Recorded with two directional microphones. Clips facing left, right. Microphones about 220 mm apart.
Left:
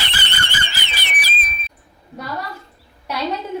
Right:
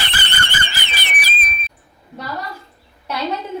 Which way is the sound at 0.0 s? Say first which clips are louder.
Right 2 dB; 55° right (ahead or behind).